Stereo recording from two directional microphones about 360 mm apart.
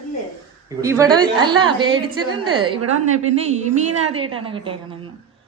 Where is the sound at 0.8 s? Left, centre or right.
Centre.